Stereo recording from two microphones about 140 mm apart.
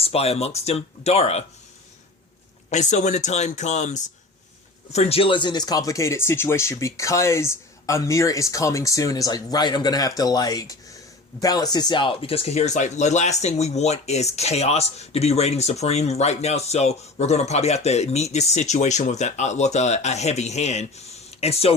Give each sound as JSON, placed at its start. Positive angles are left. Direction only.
{"t": 0.0, "sound": "speech", "side_deg": 45}
{"t": 2.6, "sound": "speech", "side_deg": 55}